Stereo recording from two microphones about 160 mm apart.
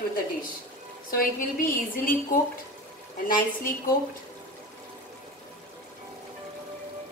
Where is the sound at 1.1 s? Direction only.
60° left (ahead or behind).